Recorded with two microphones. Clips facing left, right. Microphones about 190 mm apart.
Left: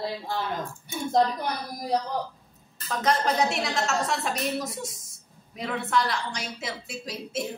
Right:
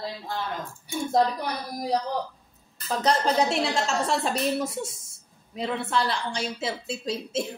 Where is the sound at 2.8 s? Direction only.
30° right (ahead or behind).